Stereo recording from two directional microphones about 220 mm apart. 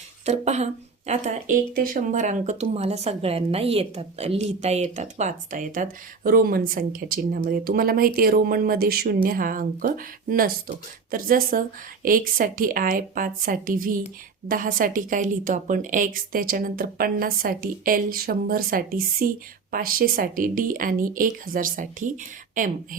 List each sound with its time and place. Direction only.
0.3 s speech: 30° right (ahead or behind)